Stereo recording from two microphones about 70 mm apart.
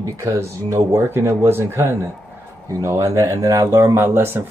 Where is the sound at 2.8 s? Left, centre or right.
Right.